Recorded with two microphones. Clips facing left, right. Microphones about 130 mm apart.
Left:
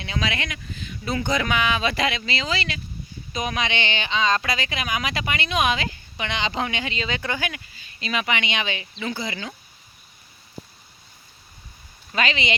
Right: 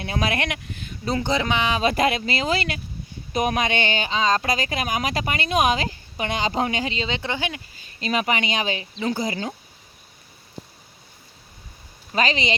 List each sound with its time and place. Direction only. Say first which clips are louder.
0.0 s speech: right 3 dB; 50° right (ahead or behind)
1.0 s speech: right 1 dB; 30° right (ahead or behind)
7.8 s speech: right 4 dB; 40° right (ahead or behind)
12.1 s speech: right 2 dB; 35° right (ahead or behind)